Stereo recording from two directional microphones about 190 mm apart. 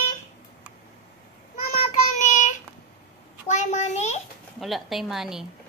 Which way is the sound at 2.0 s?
40° left (ahead or behind).